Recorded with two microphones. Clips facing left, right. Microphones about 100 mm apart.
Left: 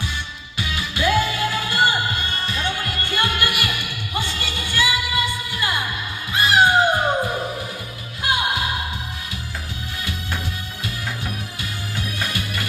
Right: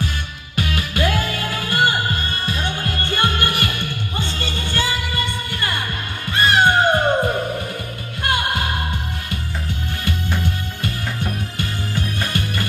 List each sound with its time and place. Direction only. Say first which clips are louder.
0.5 s music: right 4 dB; 50° right (ahead or behind)
8.2 s music: right 1 dB; 55° right (ahead or behind)
11.5 s music: right 5 dB; 45° right (ahead or behind)